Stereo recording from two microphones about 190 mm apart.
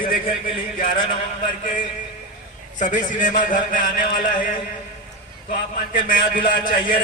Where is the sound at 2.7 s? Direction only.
40° left (ahead or behind).